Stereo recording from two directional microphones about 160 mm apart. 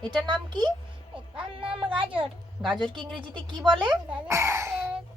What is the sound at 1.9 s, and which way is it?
Speech, 30° right (ahead or behind).